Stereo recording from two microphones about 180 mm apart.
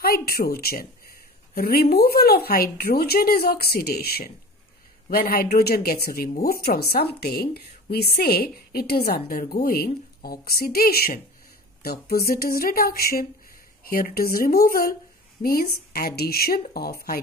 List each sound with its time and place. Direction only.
0.0 s speech: 55° left (ahead or behind)